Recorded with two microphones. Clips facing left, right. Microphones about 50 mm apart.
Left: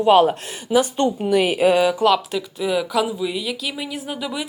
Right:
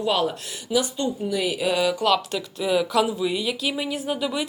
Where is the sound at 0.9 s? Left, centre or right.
Left.